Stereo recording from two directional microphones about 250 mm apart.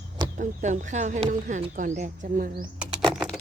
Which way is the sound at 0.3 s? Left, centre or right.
Right.